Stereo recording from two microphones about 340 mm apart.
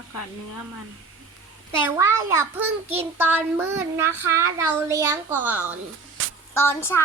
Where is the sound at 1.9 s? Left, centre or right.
Centre.